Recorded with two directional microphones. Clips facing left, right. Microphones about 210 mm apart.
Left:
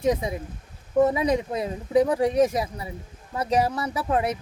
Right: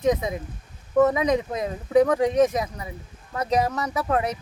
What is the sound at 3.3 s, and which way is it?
Speech, 10° left (ahead or behind).